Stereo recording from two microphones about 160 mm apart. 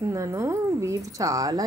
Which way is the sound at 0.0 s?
20° right (ahead or behind).